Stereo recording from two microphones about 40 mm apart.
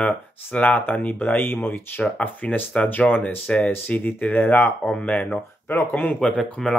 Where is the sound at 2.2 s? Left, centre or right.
Left.